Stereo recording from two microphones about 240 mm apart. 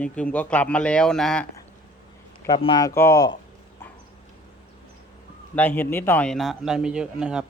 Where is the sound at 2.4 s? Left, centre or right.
Centre.